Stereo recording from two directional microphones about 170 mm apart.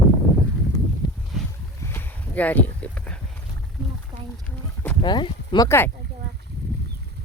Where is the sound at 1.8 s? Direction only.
10° left (ahead or behind).